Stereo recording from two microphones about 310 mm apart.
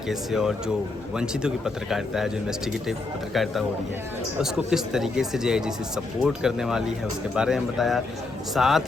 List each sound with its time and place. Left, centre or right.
0.1 s speech: centre